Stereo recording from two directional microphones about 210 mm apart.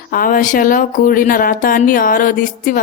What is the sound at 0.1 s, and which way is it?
A woman's voice, 45° left (ahead or behind).